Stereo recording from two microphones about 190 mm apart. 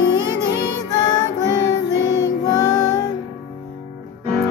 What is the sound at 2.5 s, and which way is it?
Music, 20° left (ahead or behind).